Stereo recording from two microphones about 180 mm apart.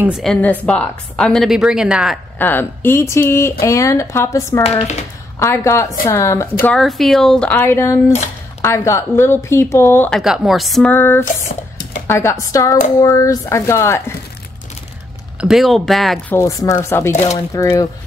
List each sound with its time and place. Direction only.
0.0 s a woman's voice: centre (ahead or behind)
2.3 s speech: 10° left (ahead or behind)
6.6 s a woman's voice: 5° left (ahead or behind)
10.2 s a woman's voice: centre (ahead or behind); by 14.1 s 15° left (ahead or behind)
15.4 s a woman's voice: centre (ahead or behind)
16.3 s speech: 20° left (ahead or behind)